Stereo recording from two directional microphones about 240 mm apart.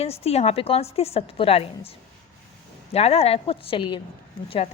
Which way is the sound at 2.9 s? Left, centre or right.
Left.